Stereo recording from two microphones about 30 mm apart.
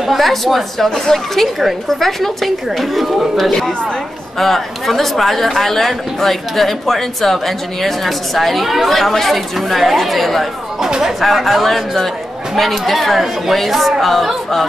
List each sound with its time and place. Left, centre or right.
0.2 s a woman's voice: centre
10.8 s speech: centre
11.3 s a woman's voice: centre